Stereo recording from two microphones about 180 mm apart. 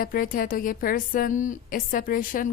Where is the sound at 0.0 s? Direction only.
50° left (ahead or behind).